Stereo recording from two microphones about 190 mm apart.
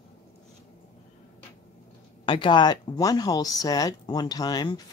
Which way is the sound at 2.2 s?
25° left (ahead or behind).